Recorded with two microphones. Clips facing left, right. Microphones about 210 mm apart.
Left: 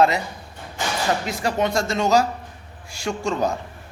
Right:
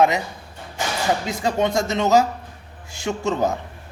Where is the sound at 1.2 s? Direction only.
20° right (ahead or behind).